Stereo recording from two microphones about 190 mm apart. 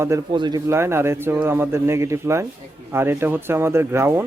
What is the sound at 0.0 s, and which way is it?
Speech, 20° right (ahead or behind).